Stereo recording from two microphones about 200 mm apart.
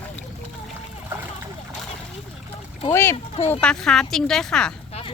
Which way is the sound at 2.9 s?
10° left (ahead or behind).